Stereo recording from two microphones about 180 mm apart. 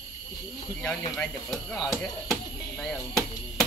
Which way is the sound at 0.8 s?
5° left (ahead or behind).